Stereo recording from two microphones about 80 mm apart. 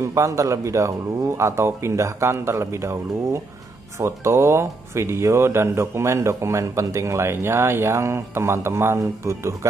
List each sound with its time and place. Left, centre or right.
0.0 s speech: right
4.0 s speech: right